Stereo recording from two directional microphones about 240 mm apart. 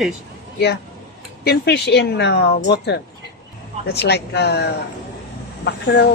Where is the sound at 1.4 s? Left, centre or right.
Left.